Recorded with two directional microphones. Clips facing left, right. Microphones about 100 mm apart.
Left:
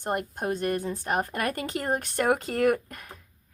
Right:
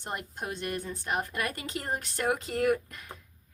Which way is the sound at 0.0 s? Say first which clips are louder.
Left 7 dB; 50° left (ahead or behind).